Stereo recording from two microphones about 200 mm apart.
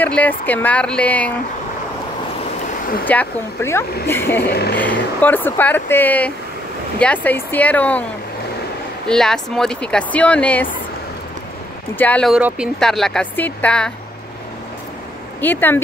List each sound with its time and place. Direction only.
0.0 s speech: 5° left (ahead or behind)
3.1 s speech: 10° left (ahead or behind)
4.5 s vehicle: 55° left (ahead or behind)
4.7 s speech: 10° left (ahead or behind)
9.0 s speech: 5° left (ahead or behind)
11.9 s speech: 10° left (ahead or behind)
12.4 s speech: 5° right (ahead or behind)
15.4 s speech: 10° left (ahead or behind)